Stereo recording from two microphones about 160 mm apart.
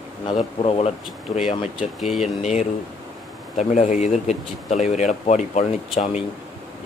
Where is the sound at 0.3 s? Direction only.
40° left (ahead or behind).